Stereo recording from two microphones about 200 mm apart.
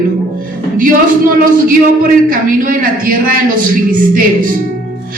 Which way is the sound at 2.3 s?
45° right (ahead or behind).